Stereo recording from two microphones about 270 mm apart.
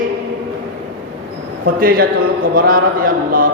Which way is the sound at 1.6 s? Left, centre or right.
Right.